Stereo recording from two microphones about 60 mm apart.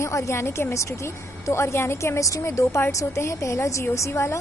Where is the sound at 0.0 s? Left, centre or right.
Left.